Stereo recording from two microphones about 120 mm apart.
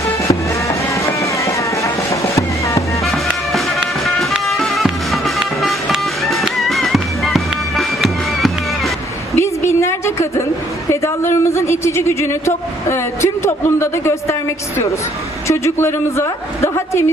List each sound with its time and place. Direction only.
0.2 s music: 25° left (ahead or behind)
3.0 s music: centre (ahead or behind)
9.3 s a sound: 25° left (ahead or behind)
11.3 s a woman's voice: 25° left (ahead or behind)
15.4 s a woman's voice: 25° left (ahead or behind)